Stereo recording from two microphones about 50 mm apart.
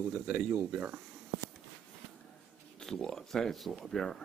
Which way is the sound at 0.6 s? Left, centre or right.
Right.